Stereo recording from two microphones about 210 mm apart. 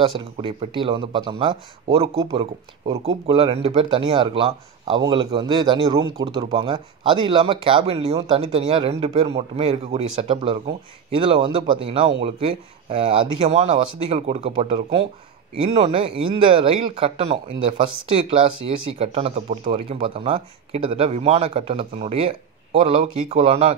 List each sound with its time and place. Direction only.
0.2 s speech: 25° right (ahead or behind)